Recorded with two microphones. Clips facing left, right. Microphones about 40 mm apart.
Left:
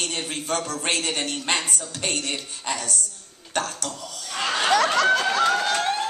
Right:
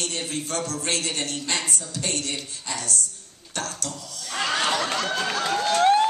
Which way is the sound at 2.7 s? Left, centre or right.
Left.